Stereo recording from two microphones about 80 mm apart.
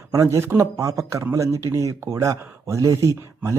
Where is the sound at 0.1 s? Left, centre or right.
Right.